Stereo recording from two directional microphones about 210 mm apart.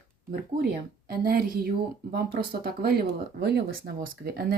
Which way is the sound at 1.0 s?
45° right (ahead or behind).